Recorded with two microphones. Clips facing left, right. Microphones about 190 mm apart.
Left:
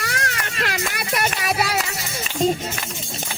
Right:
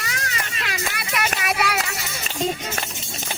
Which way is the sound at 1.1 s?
30° left (ahead or behind).